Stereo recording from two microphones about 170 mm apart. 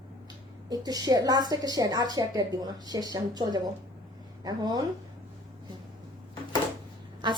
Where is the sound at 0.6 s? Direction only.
20° right (ahead or behind).